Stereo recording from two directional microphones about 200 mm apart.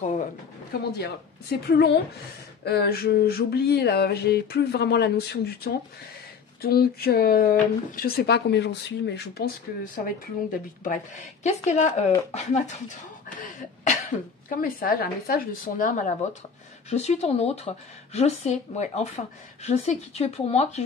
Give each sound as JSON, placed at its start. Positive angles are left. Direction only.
{"t": 0.0, "sound": "pigeon", "side_deg": 35}
{"t": 0.9, "sound": "a sound", "side_deg": 55}
{"t": 11.4, "sound": "speech", "side_deg": 35}